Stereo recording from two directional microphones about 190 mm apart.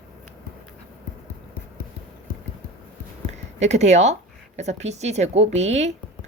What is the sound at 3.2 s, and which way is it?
Speech, 35° right (ahead or behind).